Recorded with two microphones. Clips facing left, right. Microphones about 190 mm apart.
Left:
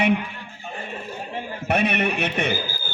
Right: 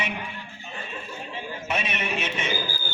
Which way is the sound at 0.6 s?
55° left (ahead or behind).